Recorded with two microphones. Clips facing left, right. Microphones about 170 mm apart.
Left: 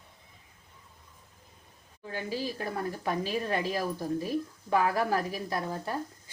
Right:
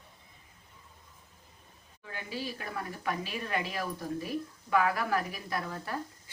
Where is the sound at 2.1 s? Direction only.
35° left (ahead or behind).